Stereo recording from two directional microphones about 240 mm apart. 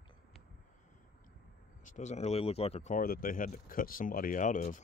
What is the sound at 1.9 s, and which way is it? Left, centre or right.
Speech, left.